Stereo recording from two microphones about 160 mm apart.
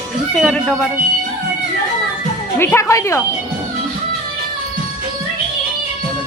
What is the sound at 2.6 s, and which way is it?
Speech, 15° left (ahead or behind).